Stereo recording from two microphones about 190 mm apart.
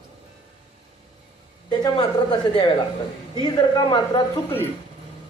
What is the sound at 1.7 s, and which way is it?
Speech, 25° left (ahead or behind).